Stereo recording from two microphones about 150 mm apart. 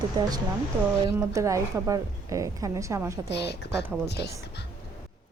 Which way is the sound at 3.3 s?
90° left.